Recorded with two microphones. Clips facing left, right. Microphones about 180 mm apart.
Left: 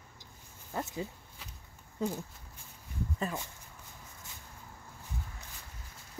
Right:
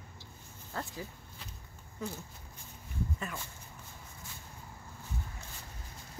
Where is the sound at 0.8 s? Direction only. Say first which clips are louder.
Left 4 dB; 20° left (ahead or behind).